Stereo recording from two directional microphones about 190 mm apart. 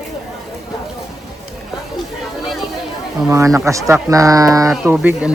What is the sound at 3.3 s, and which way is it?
Speech, 15° right (ahead or behind).